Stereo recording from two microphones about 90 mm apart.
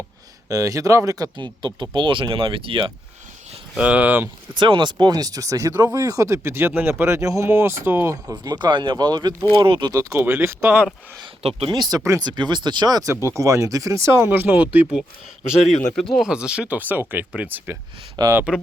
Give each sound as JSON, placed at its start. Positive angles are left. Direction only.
{"t": 0.4, "sound": "speech", "side_deg": -40}
{"t": 1.4, "sound": "speech", "side_deg": -60}
{"t": 3.8, "sound": "speech", "side_deg": -15}
{"t": 4.5, "sound": "speech", "side_deg": -60}
{"t": 8.4, "sound": "speech", "side_deg": -55}
{"t": 9.6, "sound": "speech", "side_deg": -75}
{"t": 10.1, "sound": "speech", "side_deg": -25}
{"t": 11.4, "sound": "speech", "side_deg": -90}
{"t": 11.8, "sound": "speech", "side_deg": -45}
{"t": 12.2, "sound": "speech", "side_deg": -55}
{"t": 16.0, "sound": "speech", "side_deg": 5}
{"t": 16.2, "sound": "speech", "side_deg": -10}
{"t": 18.2, "sound": "speech", "side_deg": -50}